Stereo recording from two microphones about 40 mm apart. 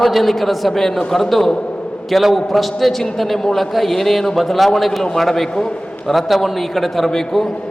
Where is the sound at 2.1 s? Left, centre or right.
Centre.